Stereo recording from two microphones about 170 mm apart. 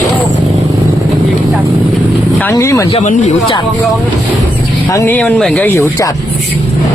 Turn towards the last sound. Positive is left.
turn(degrees=15)  # may be behind; listen again after turning